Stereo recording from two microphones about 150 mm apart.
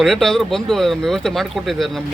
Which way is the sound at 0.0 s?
Centre (ahead or behind).